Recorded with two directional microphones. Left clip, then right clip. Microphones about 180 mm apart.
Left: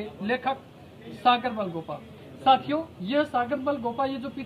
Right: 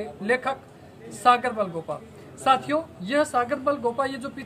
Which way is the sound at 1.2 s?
25° right (ahead or behind).